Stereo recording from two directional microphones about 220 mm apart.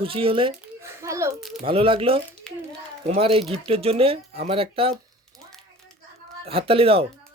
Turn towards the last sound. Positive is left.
turn(degrees=-25)  # may be behind; listen again after turning